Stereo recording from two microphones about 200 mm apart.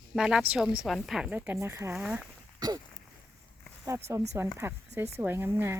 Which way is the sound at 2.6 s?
20° right (ahead or behind).